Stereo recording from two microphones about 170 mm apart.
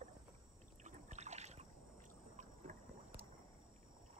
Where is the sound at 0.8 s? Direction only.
45° right (ahead or behind).